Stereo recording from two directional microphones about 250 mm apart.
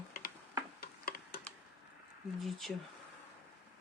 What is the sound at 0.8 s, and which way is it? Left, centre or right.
Tick-tock, left.